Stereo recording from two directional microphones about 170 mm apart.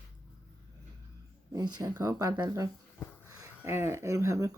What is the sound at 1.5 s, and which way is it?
Speech, 25° right (ahead or behind).